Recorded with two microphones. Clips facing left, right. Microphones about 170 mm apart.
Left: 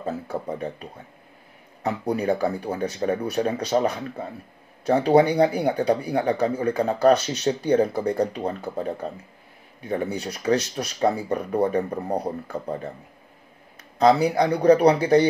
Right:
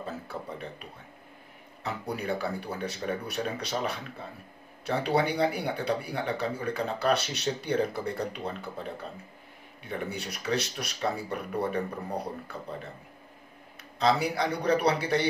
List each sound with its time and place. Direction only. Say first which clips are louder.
0.0 s a sound: left 8 dB; 40° left (ahead or behind)
1.8 s speech: left 9 dB; 45° left (ahead or behind)
13.9 s speech: left 8 dB; 45° left (ahead or behind)